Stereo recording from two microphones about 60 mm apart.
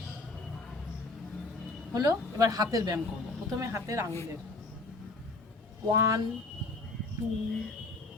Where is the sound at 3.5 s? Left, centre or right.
Right.